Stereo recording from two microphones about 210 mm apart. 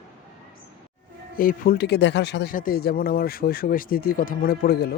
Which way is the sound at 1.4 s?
45° left (ahead or behind).